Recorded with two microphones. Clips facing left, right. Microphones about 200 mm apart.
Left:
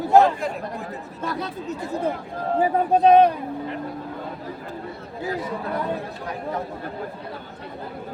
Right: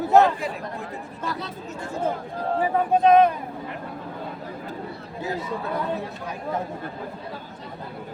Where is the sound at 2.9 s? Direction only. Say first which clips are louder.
Left 2 dB; 35° left (ahead or behind).